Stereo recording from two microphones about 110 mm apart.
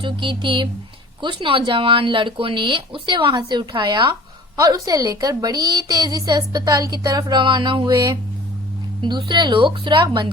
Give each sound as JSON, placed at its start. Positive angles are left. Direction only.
{"t": 0.0, "sound": "speech", "side_deg": -50}
{"t": 4.6, "sound": "a woman's voice", "side_deg": -35}